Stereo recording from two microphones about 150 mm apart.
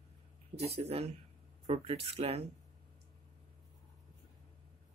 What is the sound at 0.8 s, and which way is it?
Speech, 45° right (ahead or behind).